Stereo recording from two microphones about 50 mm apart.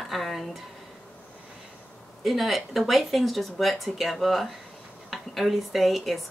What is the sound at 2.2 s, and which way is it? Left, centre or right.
Speech, centre.